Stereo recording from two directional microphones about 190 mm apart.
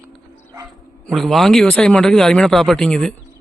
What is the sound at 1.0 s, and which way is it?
Speech, centre (ahead or behind).